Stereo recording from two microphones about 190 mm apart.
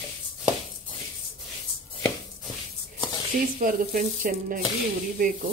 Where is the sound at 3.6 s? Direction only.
45° right (ahead or behind).